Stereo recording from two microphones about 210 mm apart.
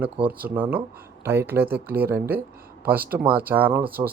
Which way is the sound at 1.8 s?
45° right (ahead or behind).